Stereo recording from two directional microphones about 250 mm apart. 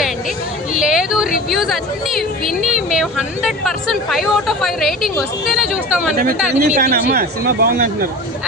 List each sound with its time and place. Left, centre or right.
0.7 s a sound: centre
1.5 s a woman's voice: centre
6.6 s speech: right